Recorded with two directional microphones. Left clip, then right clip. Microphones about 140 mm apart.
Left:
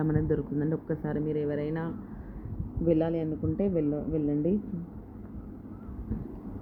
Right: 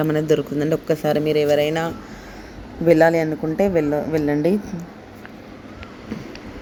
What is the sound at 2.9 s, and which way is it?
Speech, 35° right (ahead or behind).